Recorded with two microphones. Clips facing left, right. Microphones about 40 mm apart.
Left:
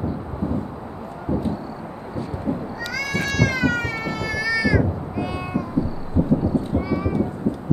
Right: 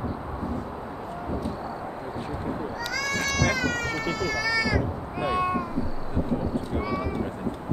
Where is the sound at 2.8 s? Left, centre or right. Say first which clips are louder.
Left 2 dB; centre.